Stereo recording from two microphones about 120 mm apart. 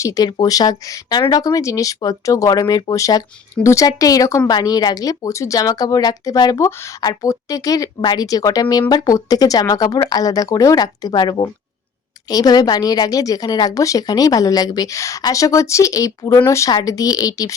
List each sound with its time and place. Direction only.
0.0 s speech: 30° left (ahead or behind)
6.7 s a woman's voice: 20° left (ahead or behind)